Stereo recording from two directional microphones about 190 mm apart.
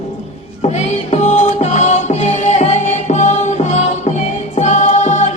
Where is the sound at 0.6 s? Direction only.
35° left (ahead or behind).